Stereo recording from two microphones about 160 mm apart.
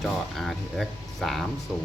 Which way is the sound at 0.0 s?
Centre (ahead or behind).